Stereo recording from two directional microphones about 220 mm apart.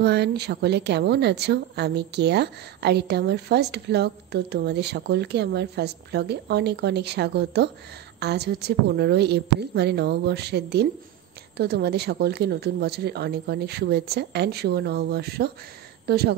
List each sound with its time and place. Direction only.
0.0 s a woman's voice: 50° right (ahead or behind)